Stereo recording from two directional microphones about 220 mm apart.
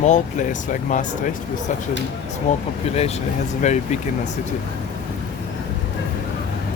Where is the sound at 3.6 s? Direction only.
35° left (ahead or behind).